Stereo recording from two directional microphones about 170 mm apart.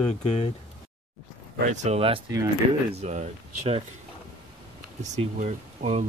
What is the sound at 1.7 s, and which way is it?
Speech, 40° right (ahead or behind).